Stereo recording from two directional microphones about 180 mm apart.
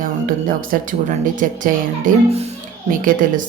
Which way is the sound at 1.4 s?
45° right (ahead or behind).